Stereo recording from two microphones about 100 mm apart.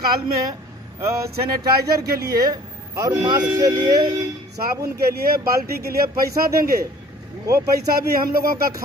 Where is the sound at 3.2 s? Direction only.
45° right (ahead or behind).